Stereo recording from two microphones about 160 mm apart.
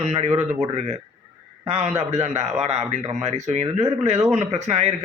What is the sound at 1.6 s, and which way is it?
A man's voice, 40° right (ahead or behind).